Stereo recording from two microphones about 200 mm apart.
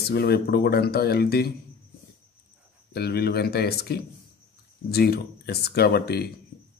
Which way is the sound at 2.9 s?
55° left (ahead or behind).